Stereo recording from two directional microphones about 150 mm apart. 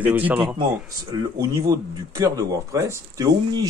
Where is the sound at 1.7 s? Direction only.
20° right (ahead or behind).